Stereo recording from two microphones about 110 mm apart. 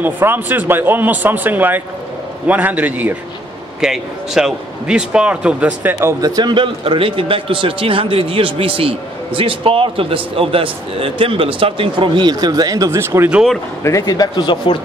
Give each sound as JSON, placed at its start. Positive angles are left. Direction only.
{"t": 0.0, "sound": "speech", "side_deg": -20}
{"t": 3.8, "sound": "speech", "side_deg": -5}
{"t": 6.2, "sound": "a man's voice", "side_deg": -40}
{"t": 13.0, "sound": "speech", "side_deg": -20}
{"t": 13.8, "sound": "speech", "side_deg": 30}